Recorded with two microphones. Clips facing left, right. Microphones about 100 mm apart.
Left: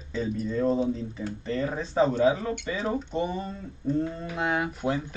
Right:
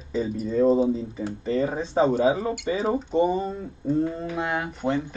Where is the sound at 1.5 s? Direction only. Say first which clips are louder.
Right 5 dB; 35° right (ahead or behind).